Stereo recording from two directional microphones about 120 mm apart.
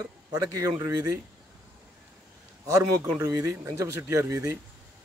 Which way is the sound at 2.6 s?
25° right (ahead or behind).